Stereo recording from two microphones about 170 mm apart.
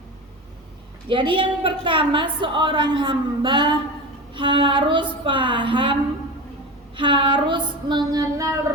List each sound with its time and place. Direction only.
1.0 s a woman's voice: 30° right (ahead or behind)